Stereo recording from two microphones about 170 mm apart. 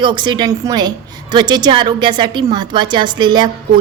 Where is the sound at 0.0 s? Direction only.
25° right (ahead or behind).